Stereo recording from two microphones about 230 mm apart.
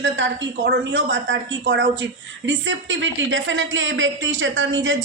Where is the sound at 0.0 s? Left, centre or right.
Right.